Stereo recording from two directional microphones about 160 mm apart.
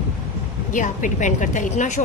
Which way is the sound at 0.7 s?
55° left (ahead or behind).